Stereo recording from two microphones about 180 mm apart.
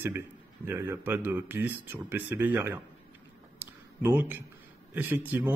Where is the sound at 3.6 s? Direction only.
10° right (ahead or behind).